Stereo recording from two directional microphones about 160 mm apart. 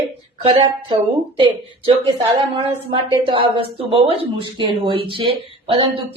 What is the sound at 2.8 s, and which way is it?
Speech, 35° right (ahead or behind).